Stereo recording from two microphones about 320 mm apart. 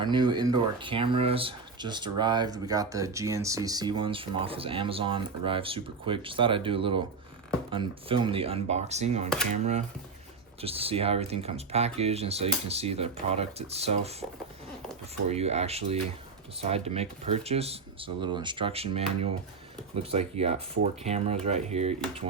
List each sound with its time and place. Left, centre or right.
0.0 s speech: centre
15.3 s speech: centre